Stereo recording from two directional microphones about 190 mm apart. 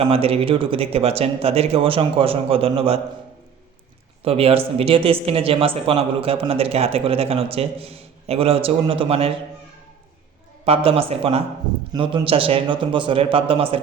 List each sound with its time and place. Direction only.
0.0 s speech: 30° right (ahead or behind)
4.2 s speech: 30° right (ahead or behind)
10.7 s a man's voice: 30° right (ahead or behind)